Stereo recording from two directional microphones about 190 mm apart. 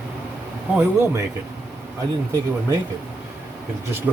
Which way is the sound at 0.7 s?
10° right (ahead or behind).